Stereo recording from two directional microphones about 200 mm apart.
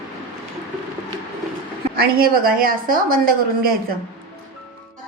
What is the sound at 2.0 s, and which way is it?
A woman's voice, 50° right (ahead or behind).